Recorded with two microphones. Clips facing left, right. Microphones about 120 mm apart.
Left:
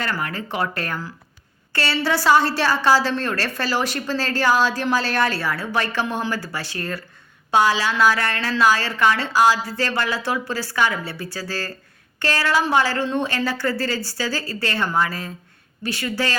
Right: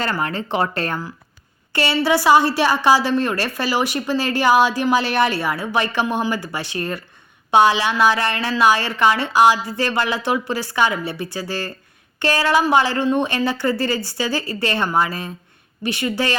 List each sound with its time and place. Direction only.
0.0 s a woman's voice: 25° right (ahead or behind)